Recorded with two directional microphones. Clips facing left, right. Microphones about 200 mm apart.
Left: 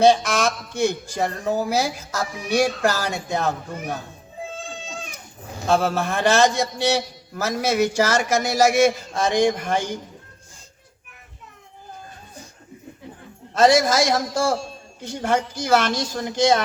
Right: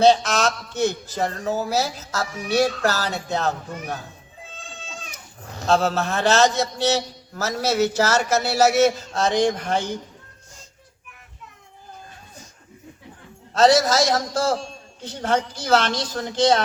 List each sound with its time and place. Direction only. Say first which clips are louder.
0.0 s a man's voice: even; 10° left (ahead or behind)
5.4 s a man's voice: even; 10° left (ahead or behind)
13.5 s a man's voice: even; 10° left (ahead or behind)